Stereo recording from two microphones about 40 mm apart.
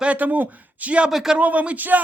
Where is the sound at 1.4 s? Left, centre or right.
Right.